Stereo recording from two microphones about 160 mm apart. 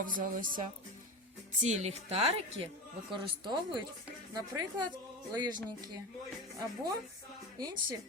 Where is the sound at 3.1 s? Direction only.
30° right (ahead or behind).